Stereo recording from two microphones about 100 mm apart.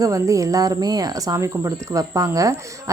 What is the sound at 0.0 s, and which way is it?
Speech, 35° right (ahead or behind).